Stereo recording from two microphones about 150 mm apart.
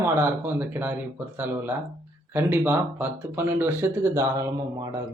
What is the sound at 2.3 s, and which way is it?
Speech, 15° right (ahead or behind).